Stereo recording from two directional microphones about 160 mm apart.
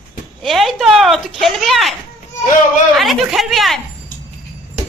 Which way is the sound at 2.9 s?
Centre (ahead or behind).